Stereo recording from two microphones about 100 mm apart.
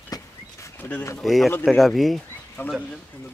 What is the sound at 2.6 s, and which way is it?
Speech, 20° left (ahead or behind).